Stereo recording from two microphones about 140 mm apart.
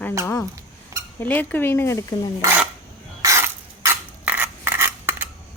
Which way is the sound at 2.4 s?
15° right (ahead or behind).